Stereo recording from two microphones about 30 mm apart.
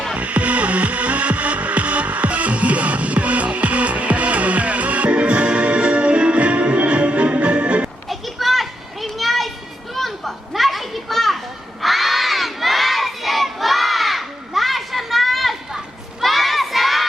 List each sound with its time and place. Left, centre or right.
0.2 s music: right
8.1 s children playing: centre
11.8 s crowd: centre